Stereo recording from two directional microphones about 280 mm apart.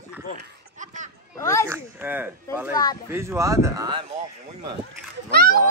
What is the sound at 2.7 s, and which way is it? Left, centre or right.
Speech, centre.